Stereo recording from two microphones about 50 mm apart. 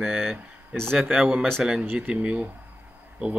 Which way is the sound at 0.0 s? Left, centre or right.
Centre.